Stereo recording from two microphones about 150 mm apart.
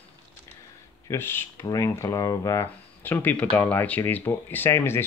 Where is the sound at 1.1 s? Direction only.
15° left (ahead or behind).